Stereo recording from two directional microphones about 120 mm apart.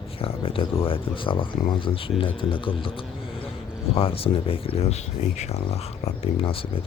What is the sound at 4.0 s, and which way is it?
Speech, 50° left (ahead or behind).